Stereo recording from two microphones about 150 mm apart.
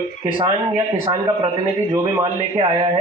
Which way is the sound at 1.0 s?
25° right (ahead or behind).